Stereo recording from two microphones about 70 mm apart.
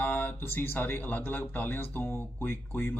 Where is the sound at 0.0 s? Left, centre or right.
Left.